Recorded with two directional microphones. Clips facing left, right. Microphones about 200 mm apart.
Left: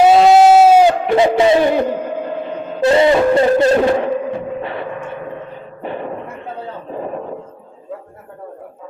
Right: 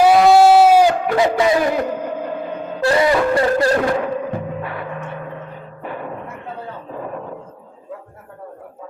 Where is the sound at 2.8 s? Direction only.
25° left (ahead or behind).